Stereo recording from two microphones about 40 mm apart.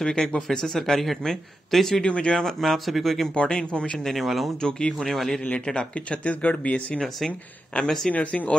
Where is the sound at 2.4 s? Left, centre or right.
Centre.